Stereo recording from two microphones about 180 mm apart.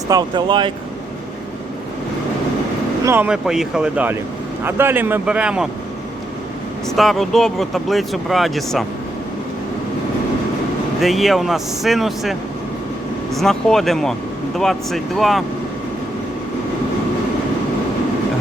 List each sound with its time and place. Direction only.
0.1 s speech: 25° right (ahead or behind)
3.0 s speech: 10° right (ahead or behind)
6.8 s speech: centre (ahead or behind)
11.0 s speech: centre (ahead or behind)